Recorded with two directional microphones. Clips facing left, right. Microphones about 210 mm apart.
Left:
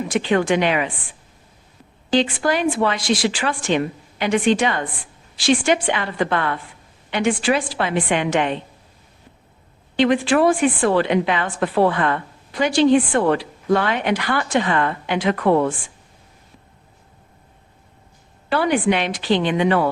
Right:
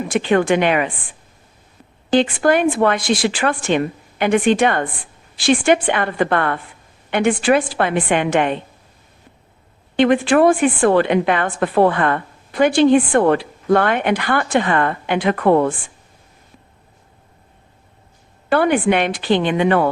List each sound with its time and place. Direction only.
0.1 s a woman's voice: 55° right (ahead or behind)
2.0 s a woman's voice: 55° right (ahead or behind)
10.0 s a woman's voice: 55° right (ahead or behind)
18.4 s a woman's voice: 55° right (ahead or behind)